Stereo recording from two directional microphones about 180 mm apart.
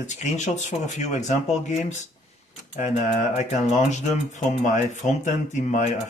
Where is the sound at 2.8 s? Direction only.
40° left (ahead or behind).